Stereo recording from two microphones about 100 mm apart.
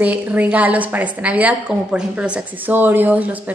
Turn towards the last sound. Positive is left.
turn(degrees=-15)  # may be behind; listen again after turning